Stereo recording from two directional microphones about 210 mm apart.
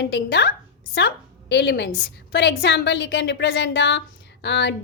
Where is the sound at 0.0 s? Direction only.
55° left (ahead or behind).